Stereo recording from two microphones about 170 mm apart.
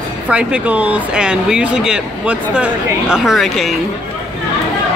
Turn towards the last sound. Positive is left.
turn(degrees=0)  # may be behind; listen again after turning